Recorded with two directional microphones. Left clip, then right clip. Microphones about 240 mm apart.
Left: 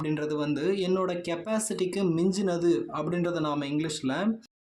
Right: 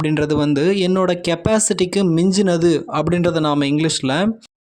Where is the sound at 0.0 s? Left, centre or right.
Right.